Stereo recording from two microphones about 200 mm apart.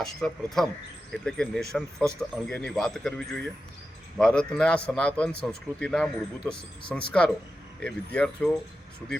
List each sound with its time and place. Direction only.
0.0 s speech: centre (ahead or behind)